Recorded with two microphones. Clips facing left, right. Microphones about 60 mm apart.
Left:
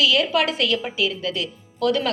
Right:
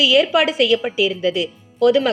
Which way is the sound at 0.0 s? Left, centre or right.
Centre.